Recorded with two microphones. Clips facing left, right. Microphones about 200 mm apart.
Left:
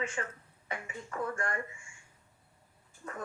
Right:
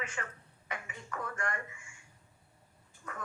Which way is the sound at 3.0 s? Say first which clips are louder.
Left 3 dB; 30° left (ahead or behind).